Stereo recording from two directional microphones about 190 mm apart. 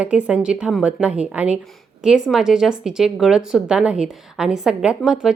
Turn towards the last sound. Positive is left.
turn(degrees=-5)  # may be behind; listen again after turning